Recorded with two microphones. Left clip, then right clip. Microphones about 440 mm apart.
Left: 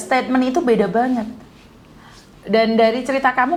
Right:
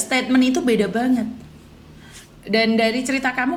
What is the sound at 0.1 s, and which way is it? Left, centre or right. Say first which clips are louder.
A woman's voice: left 2 dB; centre.